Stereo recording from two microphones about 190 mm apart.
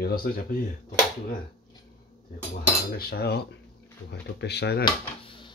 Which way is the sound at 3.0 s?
55° left (ahead or behind).